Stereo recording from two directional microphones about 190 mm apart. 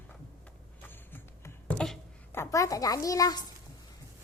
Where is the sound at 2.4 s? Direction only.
15° left (ahead or behind).